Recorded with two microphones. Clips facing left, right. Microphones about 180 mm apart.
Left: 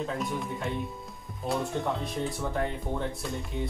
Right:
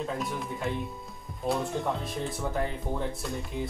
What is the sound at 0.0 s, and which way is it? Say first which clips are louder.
Speech: left 1 dB; centre (ahead or behind).